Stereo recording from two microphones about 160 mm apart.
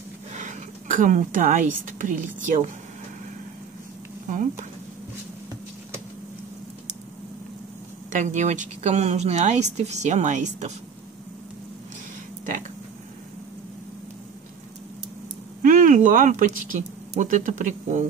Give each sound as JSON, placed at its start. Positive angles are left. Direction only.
{"t": 0.3, "sound": "speech", "side_deg": -50}
{"t": 4.3, "sound": "speech", "side_deg": -55}
{"t": 8.1, "sound": "speech", "side_deg": -50}
{"t": 15.6, "sound": "speech", "side_deg": -55}